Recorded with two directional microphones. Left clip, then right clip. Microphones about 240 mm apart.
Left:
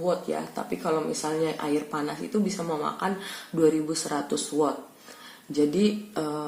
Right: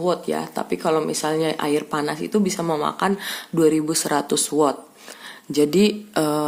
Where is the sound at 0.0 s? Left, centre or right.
Right.